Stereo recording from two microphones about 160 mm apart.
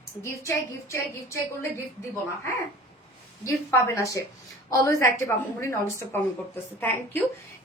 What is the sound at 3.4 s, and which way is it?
A woman's voice, 20° left (ahead or behind).